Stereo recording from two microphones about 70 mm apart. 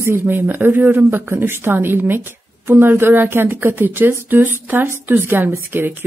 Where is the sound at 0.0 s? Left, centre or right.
Right.